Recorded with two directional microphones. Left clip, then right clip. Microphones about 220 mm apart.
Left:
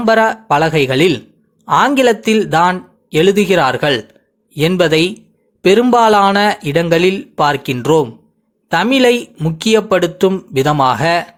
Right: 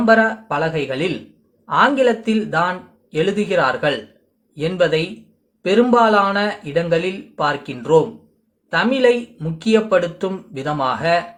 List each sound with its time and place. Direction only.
0.0 s speech: 40° left (ahead or behind)